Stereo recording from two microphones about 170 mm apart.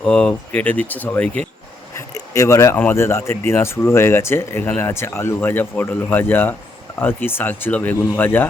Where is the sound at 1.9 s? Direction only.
15° left (ahead or behind).